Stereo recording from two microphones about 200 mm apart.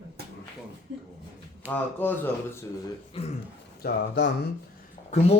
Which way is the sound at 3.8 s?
50° left (ahead or behind).